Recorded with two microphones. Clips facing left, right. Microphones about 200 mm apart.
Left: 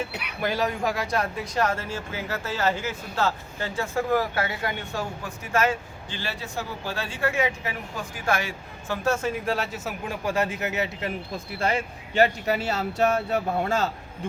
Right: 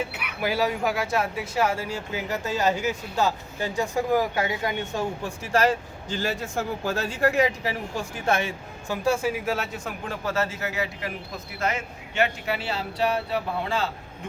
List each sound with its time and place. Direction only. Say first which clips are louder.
0.4 s speech: right 1 dB; 5° right (ahead or behind)
5.5 s speech: right 2 dB; 35° right (ahead or behind)
8.2 s speech: right 1 dB; 25° right (ahead or behind)
9.0 s a man's voice: right 1 dB; 10° right (ahead or behind); by 13.9 s 45° left (ahead or behind)